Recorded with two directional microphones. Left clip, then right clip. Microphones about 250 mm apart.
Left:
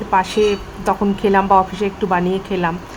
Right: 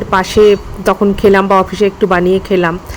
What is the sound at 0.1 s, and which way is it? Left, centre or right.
Speech, right.